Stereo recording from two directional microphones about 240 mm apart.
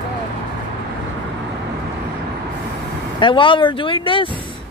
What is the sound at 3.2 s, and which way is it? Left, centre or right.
Speech, left.